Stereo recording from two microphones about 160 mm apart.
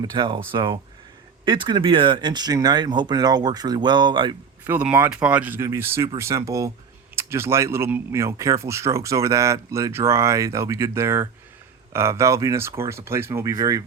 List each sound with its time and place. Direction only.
0.0 s speech: 30° right (ahead or behind)
1.5 s speech: 30° right (ahead or behind)
4.6 s speech: 10° right (ahead or behind)